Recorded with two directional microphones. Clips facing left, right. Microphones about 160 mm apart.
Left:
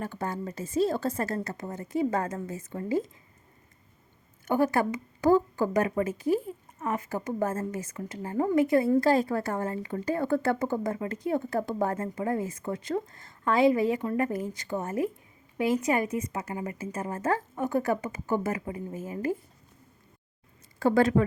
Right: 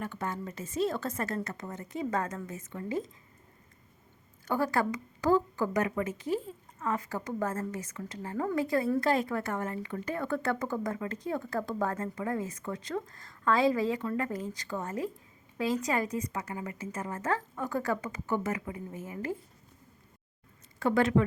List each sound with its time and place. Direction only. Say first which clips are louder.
0.0 s a woman's voice: left 3 dB; 35° left (ahead or behind)
4.4 s a woman's voice: left 4 dB; 25° left (ahead or behind)
20.7 s a woman's voice: left 3 dB; 35° left (ahead or behind)